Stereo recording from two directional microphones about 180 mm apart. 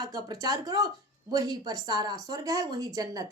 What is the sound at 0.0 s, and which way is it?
A woman's voice, 20° right (ahead or behind).